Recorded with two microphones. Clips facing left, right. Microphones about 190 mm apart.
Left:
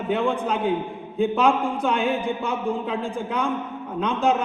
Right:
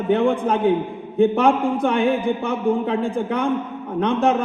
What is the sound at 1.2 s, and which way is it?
A man's voice, 70° right (ahead or behind).